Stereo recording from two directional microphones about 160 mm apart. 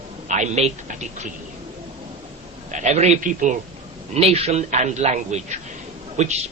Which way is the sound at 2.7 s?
45° right (ahead or behind).